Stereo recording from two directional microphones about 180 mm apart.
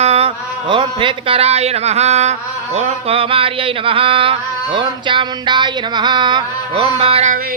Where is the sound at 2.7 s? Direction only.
35° right (ahead or behind).